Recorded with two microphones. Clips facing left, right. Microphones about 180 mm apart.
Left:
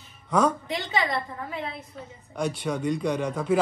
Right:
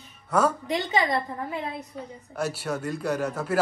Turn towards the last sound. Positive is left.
turn(degrees=-5)  # may be behind; listen again after turning